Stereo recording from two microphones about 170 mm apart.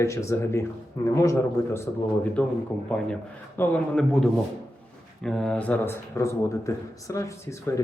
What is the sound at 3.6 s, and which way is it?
A man's voice, 5° left (ahead or behind).